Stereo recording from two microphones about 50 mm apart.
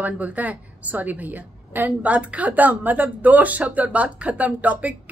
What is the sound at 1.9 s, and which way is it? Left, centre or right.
A woman's voice, right.